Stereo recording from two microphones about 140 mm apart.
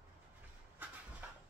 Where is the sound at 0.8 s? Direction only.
15° right (ahead or behind).